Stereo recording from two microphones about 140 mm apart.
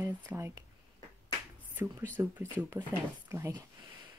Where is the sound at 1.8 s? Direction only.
15° right (ahead or behind).